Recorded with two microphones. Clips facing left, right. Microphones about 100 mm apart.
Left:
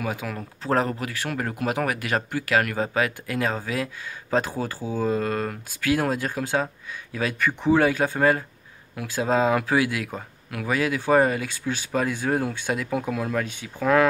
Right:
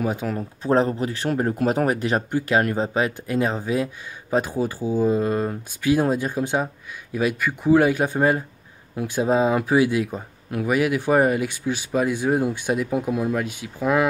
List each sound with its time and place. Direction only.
0.0 s speech: 35° right (ahead or behind)
0.6 s speech: 20° right (ahead or behind)